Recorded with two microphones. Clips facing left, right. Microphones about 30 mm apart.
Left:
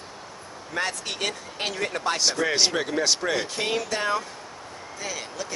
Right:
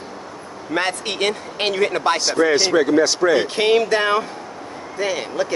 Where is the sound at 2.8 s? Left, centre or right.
Centre.